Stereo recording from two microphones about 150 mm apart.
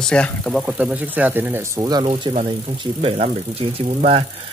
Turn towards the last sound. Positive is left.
turn(degrees=-45)  # may be behind; listen again after turning